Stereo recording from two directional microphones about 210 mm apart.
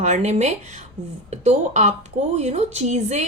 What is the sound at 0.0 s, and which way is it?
A woman's voice, 35° right (ahead or behind).